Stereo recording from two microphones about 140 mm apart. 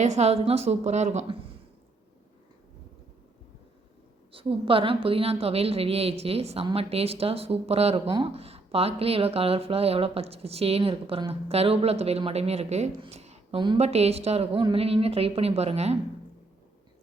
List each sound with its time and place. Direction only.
0.0 s speech: 50° right (ahead or behind)
4.3 s speech: 40° right (ahead or behind)
13.0 s a sound: 50° right (ahead or behind)
13.7 s speech: 50° right (ahead or behind)